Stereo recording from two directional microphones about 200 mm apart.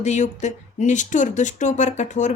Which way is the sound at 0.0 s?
35° left (ahead or behind).